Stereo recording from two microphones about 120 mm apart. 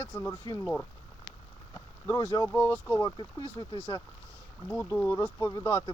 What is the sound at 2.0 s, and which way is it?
Speech, 25° left (ahead or behind).